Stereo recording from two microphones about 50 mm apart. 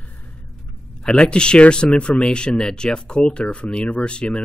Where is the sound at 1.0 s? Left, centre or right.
Centre.